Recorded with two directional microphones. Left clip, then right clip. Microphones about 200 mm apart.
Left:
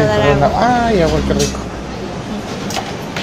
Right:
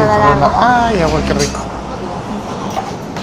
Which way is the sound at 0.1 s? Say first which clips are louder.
Right 3 dB; 20° left (ahead or behind).